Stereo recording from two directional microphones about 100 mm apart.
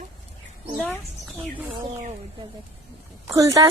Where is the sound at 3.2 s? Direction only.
35° right (ahead or behind).